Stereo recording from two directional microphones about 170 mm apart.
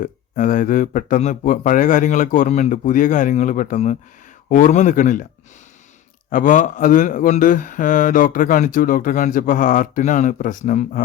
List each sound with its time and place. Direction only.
0.0 s a man's voice: 50° left (ahead or behind)
6.3 s a man's voice: 50° left (ahead or behind)